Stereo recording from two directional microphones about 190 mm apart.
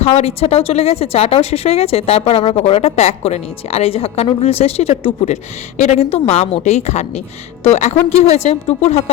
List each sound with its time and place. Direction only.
0.0 s speech: 35° left (ahead or behind)